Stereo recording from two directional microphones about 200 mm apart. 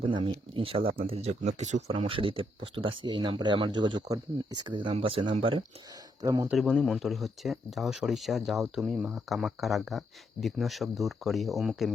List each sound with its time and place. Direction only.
0.0 s speech: 25° right (ahead or behind)
6.2 s speech: 15° right (ahead or behind)
6.5 s speech: centre (ahead or behind)